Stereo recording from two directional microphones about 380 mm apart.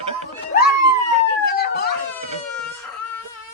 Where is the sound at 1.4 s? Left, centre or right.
Left.